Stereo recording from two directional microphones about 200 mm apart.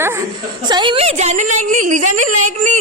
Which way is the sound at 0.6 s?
25° right (ahead or behind).